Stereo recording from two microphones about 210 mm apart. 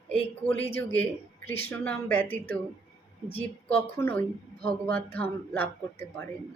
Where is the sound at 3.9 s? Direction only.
10° left (ahead or behind).